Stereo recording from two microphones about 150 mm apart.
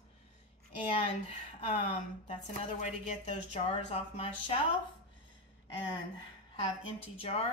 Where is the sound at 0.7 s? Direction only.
40° left (ahead or behind).